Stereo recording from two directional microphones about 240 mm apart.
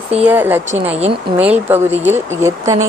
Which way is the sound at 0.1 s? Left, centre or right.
Centre.